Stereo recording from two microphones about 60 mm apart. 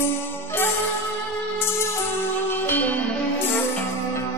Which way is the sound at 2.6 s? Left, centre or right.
Left.